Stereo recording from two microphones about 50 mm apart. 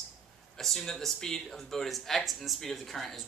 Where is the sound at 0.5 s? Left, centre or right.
Centre.